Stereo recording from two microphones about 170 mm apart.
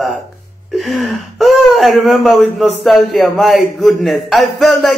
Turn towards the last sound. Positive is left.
turn(degrees=0)  # may be behind; listen again after turning